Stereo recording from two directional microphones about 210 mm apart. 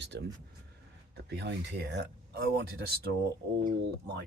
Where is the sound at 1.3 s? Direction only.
50° right (ahead or behind).